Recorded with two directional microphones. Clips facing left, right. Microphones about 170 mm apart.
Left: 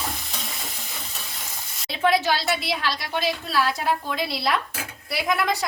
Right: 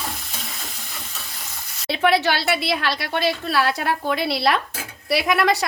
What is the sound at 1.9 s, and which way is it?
A woman's voice, 70° right (ahead or behind).